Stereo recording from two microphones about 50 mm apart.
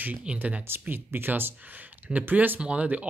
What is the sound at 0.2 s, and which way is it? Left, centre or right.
Speech, right.